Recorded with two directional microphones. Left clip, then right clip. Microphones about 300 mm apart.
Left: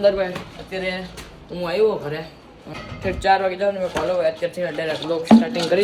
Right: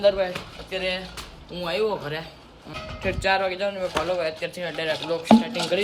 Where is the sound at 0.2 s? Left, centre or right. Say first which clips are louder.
Left 2 dB; centre.